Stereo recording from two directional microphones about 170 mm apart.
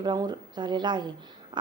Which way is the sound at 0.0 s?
25° right (ahead or behind).